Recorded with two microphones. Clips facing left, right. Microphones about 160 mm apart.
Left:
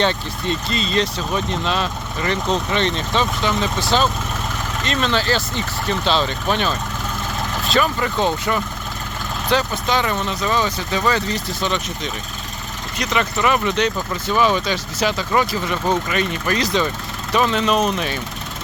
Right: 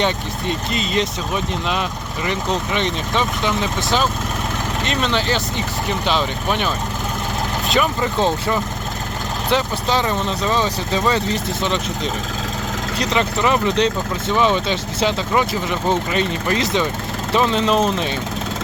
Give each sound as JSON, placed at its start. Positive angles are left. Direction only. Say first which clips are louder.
{"t": 0.7, "sound": "speech", "louder": "even", "side_deg": -15}
{"t": 13.0, "sound": "speech", "louder": "right 1 dB", "side_deg": -25}